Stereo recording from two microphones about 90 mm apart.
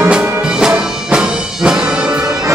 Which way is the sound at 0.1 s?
10° right (ahead or behind).